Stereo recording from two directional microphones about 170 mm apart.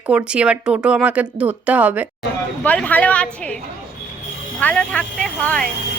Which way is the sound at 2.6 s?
10° left (ahead or behind).